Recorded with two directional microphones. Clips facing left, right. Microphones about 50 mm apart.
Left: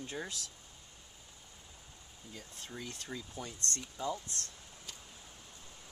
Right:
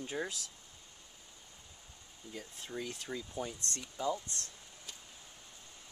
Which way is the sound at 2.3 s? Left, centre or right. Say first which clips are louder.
Right 3 dB; centre.